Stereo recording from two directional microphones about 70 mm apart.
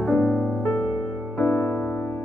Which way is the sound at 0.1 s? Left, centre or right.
Left.